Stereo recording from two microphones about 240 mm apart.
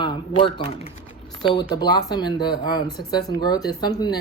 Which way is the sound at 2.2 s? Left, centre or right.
Centre.